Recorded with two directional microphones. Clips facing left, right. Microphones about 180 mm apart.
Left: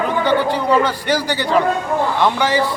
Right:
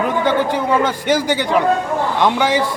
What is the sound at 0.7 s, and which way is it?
A man's voice, 20° right (ahead or behind).